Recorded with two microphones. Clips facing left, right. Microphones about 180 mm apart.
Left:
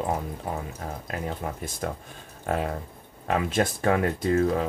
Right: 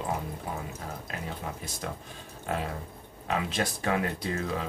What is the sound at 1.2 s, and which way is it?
Speech, 50° left (ahead or behind).